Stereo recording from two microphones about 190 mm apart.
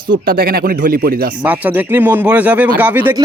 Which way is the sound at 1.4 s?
10° right (ahead or behind).